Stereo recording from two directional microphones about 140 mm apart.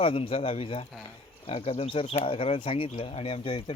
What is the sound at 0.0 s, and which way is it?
Speech, 40° left (ahead or behind).